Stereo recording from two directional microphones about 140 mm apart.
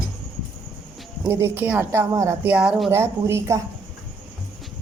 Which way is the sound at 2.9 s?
20° right (ahead or behind).